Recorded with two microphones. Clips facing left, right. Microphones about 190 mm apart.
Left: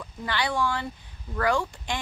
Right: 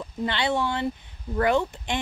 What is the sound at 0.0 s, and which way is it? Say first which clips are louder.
Speech: right 3 dB; 25° right (ahead or behind).